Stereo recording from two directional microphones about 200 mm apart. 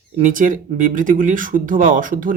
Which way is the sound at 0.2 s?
40° right (ahead or behind).